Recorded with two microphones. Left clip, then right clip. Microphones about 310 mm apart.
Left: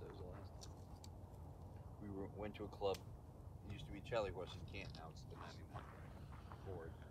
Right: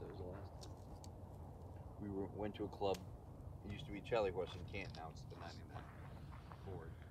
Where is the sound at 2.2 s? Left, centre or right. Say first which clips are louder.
Right 4 dB; right.